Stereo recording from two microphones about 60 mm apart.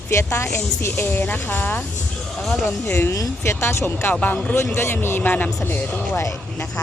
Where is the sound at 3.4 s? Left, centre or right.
Left.